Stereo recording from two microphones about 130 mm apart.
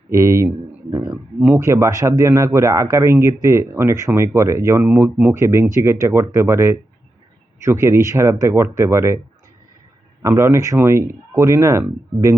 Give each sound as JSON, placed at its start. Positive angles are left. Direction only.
{"t": 0.1, "sound": "speech", "side_deg": -20}
{"t": 1.1, "sound": "speech", "side_deg": -10}
{"t": 1.5, "sound": "speech", "side_deg": -20}
{"t": 10.2, "sound": "speech", "side_deg": -20}